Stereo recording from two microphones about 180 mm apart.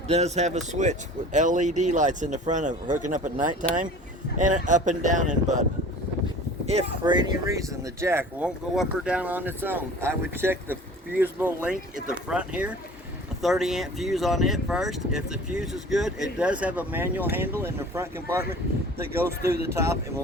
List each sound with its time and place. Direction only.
0.1 s speech: 40° right (ahead or behind)
7.0 s speech: 25° right (ahead or behind)